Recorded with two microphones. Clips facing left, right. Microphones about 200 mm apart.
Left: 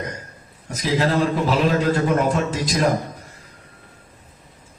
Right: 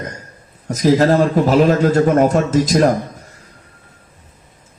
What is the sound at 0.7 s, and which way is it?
A man's voice, 45° right (ahead or behind).